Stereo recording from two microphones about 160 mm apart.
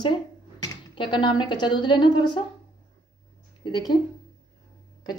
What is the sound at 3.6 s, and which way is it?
Speech, 25° left (ahead or behind).